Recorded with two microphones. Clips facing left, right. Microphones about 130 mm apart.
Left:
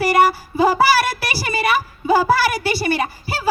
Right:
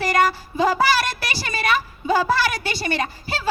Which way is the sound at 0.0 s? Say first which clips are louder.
Left 4 dB; 5° left (ahead or behind).